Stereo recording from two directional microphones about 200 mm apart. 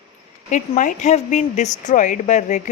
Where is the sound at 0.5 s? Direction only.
40° left (ahead or behind).